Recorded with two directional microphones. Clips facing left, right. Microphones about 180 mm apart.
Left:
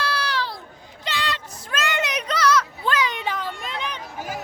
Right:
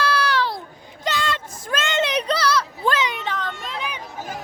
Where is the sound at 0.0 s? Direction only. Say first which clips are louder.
Right 5 dB; 55° right (ahead or behind).